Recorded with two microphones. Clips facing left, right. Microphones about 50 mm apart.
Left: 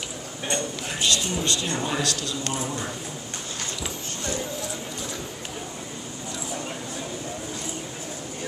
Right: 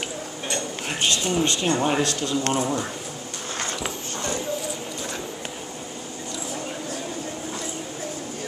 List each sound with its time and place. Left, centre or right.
0.8 s a sound: right
1.7 s speech: right
2.4 s speech: right